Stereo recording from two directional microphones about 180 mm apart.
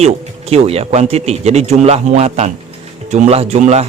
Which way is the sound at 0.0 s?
35° right (ahead or behind).